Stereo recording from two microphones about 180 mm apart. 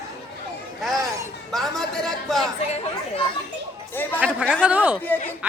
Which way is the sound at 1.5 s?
Centre (ahead or behind).